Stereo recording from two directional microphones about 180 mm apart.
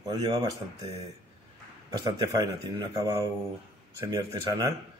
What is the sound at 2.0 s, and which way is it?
A man's voice, 20° right (ahead or behind).